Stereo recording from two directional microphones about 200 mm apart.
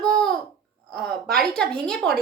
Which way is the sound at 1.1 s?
50° right (ahead or behind).